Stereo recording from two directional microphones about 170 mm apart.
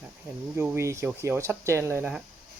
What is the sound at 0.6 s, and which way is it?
Speech, 15° right (ahead or behind).